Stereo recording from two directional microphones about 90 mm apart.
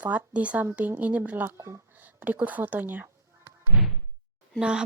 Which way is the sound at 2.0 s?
20° right (ahead or behind).